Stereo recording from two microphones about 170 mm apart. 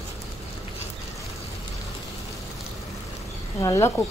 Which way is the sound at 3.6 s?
20° left (ahead or behind).